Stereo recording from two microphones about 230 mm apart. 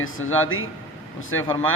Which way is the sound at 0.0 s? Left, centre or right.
Left.